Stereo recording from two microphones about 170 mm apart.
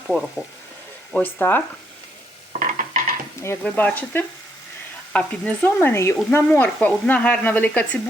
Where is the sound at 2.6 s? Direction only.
50° right (ahead or behind).